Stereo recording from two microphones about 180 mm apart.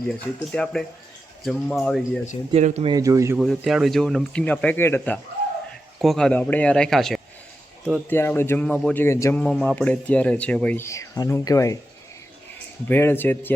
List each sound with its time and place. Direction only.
0.5 s speech: 5° left (ahead or behind)
2.5 s speech: 40° right (ahead or behind)
2.9 s speech: 20° right (ahead or behind)
3.3 s speech: centre (ahead or behind)
8.1 s speech: 10° left (ahead or behind)
9.4 s speech: centre (ahead or behind); by 11.8 s 20° left (ahead or behind)
12.9 s speech: 10° left (ahead or behind)